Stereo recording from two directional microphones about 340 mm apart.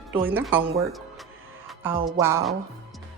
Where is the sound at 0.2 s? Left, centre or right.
Centre.